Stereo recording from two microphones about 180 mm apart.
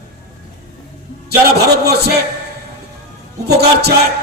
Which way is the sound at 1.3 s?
60° right (ahead or behind).